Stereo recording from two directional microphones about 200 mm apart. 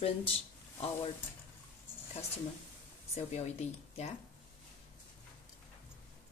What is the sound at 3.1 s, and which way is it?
Speech, 35° left (ahead or behind).